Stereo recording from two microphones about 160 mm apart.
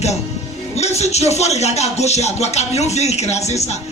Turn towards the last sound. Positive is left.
turn(degrees=45)  # may be behind; listen again after turning